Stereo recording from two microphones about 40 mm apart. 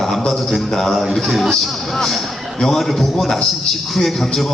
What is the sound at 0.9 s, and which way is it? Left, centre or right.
A man's voice, centre.